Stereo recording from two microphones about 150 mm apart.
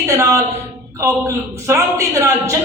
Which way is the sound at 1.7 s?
20° right (ahead or behind).